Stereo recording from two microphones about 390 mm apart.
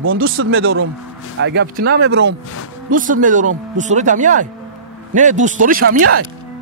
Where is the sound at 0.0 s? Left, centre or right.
Right.